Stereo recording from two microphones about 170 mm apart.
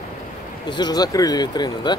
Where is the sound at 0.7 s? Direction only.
25° left (ahead or behind).